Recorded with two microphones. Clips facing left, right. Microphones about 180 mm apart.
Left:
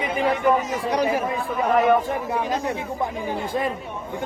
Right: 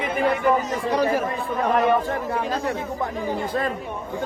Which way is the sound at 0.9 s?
15° left (ahead or behind).